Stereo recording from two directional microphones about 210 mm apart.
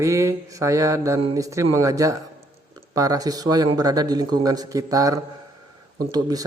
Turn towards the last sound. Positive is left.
turn(degrees=-20)  # may be behind; listen again after turning